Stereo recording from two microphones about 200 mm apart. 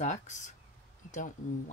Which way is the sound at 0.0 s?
35° left (ahead or behind).